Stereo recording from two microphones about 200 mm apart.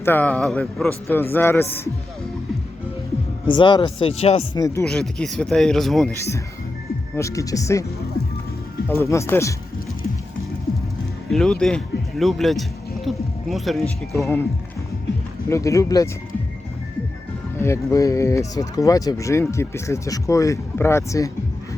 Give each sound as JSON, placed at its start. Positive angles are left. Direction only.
{"t": 0.0, "sound": "speech", "side_deg": 10}
{"t": 3.4, "sound": "speech", "side_deg": 25}
{"t": 4.5, "sound": "speech", "side_deg": 15}
{"t": 4.8, "sound": "speech", "side_deg": 5}
{"t": 6.1, "sound": "speech", "side_deg": 15}
{"t": 8.9, "sound": "speech", "side_deg": 15}
{"t": 11.3, "sound": "speech", "side_deg": 5}
{"t": 14.1, "sound": "speech", "side_deg": 15}
{"t": 15.4, "sound": "speech", "side_deg": 15}
{"t": 17.6, "sound": "speech", "side_deg": 15}